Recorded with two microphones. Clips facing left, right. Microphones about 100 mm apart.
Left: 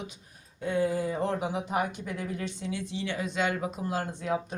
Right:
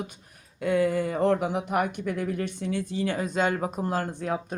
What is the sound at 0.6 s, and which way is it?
Speech, 75° right (ahead or behind).